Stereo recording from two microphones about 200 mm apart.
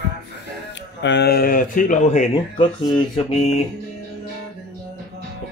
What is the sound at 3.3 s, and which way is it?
Music, 30° left (ahead or behind).